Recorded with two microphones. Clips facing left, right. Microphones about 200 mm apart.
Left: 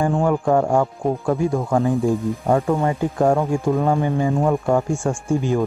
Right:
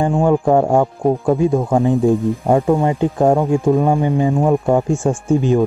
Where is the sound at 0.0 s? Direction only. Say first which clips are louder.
Right 4 dB; 20° right (ahead or behind).